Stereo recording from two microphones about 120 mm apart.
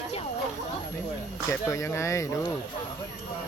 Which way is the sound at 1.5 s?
25° left (ahead or behind).